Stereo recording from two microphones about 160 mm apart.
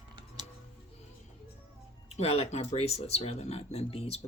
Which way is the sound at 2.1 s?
40° left (ahead or behind).